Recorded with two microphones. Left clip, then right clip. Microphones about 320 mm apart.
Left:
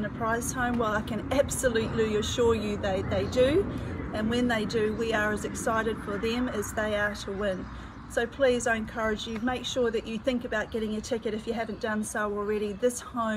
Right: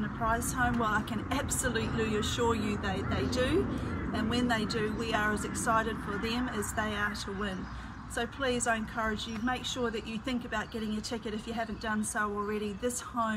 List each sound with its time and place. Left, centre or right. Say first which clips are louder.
0.2 s speech: left 1 dB; centre